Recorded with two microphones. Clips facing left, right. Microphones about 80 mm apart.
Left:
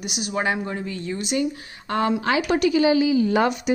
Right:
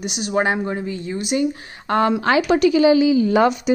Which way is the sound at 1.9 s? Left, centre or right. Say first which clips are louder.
Right 5 dB; right.